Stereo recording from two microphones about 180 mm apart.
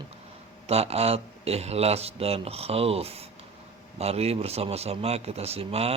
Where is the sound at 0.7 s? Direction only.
35° right (ahead or behind).